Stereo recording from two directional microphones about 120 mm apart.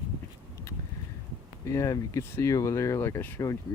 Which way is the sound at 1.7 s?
25° left (ahead or behind).